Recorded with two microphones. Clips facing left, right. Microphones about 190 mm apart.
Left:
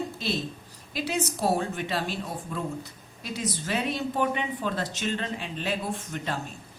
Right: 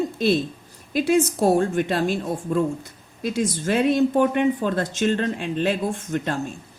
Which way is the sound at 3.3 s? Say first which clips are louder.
Right 8 dB; 50° right (ahead or behind).